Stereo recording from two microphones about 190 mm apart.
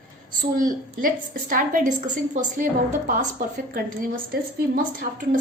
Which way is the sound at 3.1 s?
45° right (ahead or behind).